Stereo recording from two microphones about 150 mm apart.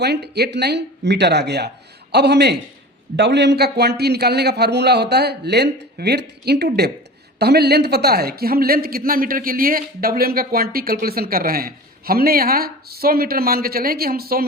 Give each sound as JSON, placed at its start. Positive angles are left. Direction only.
{"t": 0.0, "sound": "a man's voice", "side_deg": -90}